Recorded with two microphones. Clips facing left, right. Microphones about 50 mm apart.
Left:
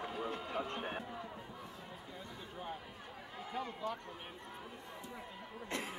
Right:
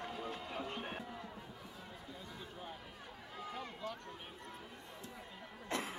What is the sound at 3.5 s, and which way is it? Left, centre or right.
Speech, centre.